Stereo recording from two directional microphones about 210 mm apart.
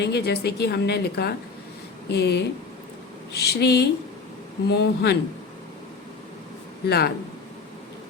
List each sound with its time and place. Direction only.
0.0 s a woman's voice: 50° left (ahead or behind)
6.8 s a woman's voice: 50° left (ahead or behind)